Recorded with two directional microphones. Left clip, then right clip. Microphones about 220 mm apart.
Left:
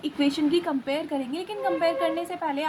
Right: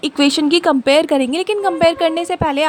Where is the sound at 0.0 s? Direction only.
55° right (ahead or behind).